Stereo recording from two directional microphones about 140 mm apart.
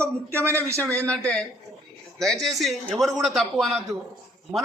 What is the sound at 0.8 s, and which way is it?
A man's voice, 10° left (ahead or behind).